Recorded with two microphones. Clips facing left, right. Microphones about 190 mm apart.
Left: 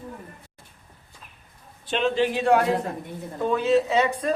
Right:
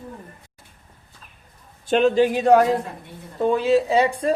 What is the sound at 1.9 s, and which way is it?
Speech, 45° right (ahead or behind).